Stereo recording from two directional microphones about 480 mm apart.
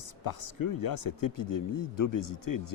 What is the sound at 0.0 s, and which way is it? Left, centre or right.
Speech, left.